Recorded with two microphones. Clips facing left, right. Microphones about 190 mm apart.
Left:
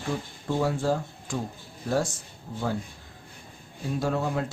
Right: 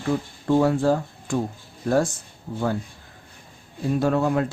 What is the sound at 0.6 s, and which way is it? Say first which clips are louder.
Speech: right 5 dB; 60° right (ahead or behind).